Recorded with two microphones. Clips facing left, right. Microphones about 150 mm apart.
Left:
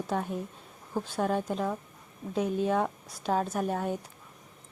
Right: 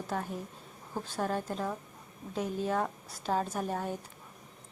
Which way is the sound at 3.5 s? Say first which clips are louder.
Left 4 dB; 5° left (ahead or behind).